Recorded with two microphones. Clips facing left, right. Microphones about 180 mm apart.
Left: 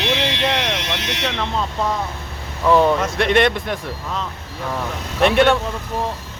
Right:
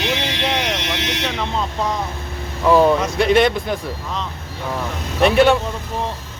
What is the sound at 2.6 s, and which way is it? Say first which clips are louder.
Speech: right 1 dB; centre (ahead or behind).